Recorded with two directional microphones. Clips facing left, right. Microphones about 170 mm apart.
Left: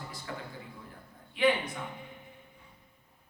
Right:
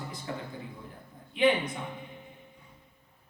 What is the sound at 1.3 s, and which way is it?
Speech, 20° right (ahead or behind).